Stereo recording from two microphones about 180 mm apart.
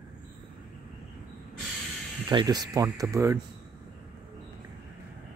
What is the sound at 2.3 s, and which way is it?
Speech, 20° right (ahead or behind).